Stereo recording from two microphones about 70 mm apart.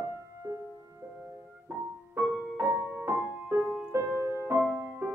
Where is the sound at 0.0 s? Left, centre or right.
Right.